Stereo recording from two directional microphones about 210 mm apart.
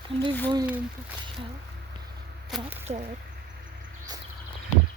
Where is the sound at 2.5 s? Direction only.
Centre (ahead or behind).